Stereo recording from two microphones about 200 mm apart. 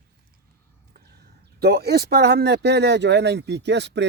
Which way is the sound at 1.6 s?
55° right (ahead or behind).